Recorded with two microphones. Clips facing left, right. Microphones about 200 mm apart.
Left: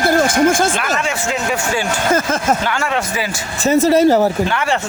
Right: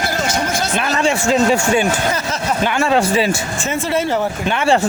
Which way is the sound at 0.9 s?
30° right (ahead or behind).